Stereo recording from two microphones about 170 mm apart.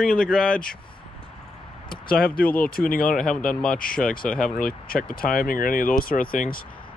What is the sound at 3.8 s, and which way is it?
Speech, 60° left (ahead or behind).